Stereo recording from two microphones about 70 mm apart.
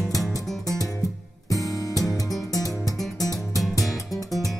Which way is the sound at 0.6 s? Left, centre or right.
Left.